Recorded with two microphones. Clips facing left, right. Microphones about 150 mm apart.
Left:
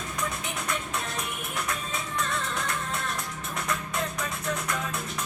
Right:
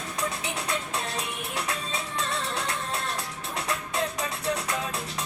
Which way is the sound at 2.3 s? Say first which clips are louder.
Right 1 dB; 30° right (ahead or behind).